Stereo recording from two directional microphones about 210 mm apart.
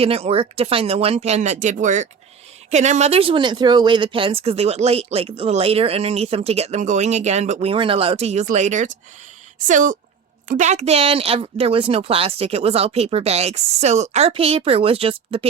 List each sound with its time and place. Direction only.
0.0 s a woman's voice: 30° right (ahead or behind)